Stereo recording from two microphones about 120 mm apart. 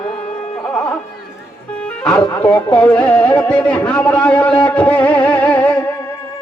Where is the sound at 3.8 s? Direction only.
10° left (ahead or behind).